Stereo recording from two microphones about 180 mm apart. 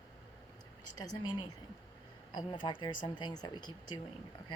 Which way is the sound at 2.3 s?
25° left (ahead or behind).